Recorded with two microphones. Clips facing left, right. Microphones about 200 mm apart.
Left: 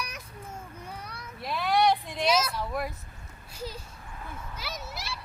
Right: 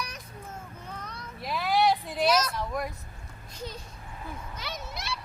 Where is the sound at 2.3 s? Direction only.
5° left (ahead or behind).